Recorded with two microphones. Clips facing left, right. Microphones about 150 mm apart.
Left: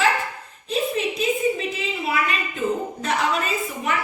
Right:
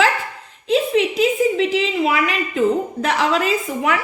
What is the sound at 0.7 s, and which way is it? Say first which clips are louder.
A woman's voice: right 7 dB; 90° right.